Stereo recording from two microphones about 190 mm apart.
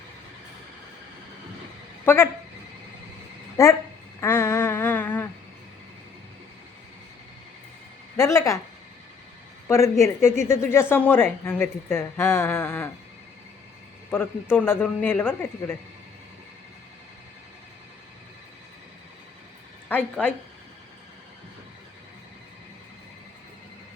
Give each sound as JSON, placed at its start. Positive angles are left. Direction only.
{"t": 2.0, "sound": "speech", "side_deg": 10}
{"t": 3.6, "sound": "speech", "side_deg": 15}
{"t": 4.2, "sound": "a sound", "side_deg": 10}
{"t": 8.1, "sound": "speech", "side_deg": 15}
{"t": 9.6, "sound": "speech", "side_deg": 15}
{"t": 14.5, "sound": "speech", "side_deg": 10}
{"t": 19.9, "sound": "speech", "side_deg": 5}